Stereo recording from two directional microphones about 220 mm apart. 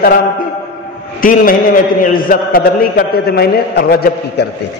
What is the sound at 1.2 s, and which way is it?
A man's voice, 40° left (ahead or behind).